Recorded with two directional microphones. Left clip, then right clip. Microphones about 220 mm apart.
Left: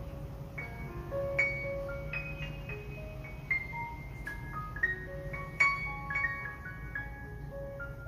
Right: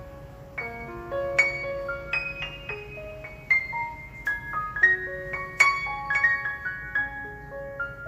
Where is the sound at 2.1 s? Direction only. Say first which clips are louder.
Right 10 dB; 40° right (ahead or behind).